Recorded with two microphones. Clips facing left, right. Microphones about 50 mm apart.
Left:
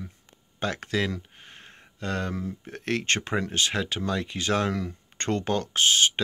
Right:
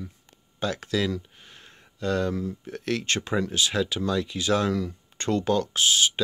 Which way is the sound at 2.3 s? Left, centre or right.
Left.